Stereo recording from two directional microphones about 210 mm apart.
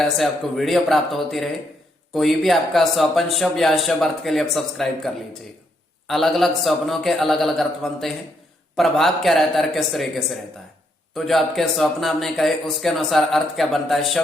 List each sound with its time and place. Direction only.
0.0 s speech: centre (ahead or behind)